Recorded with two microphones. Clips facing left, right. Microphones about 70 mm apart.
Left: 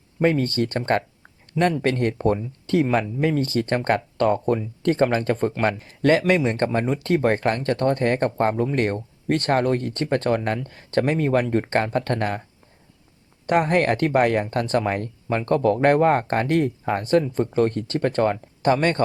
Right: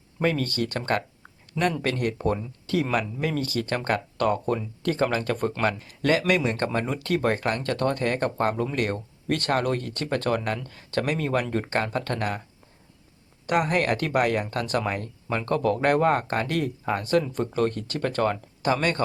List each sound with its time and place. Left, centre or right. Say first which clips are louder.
0.2 s speech: left 5 dB; left
13.5 s speech: left 4 dB; left